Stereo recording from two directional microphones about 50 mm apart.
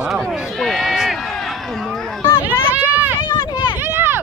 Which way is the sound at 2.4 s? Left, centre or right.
Right.